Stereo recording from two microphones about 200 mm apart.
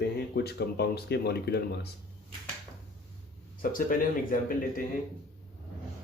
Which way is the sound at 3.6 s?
45° left (ahead or behind).